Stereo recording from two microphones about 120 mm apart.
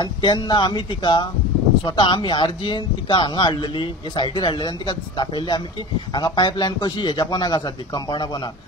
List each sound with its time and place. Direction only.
0.0 s speech: 35° left (ahead or behind)